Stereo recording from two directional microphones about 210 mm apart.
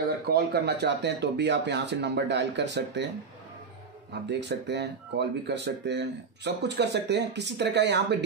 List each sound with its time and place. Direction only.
0.3 s speech: 50° right (ahead or behind)
4.1 s speech: 55° right (ahead or behind)